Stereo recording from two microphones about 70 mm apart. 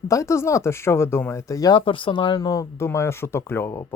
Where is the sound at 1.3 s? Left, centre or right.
Left.